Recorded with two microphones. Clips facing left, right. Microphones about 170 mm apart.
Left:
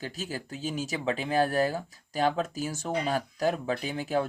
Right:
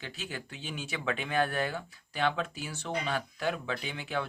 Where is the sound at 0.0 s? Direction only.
40° left (ahead or behind).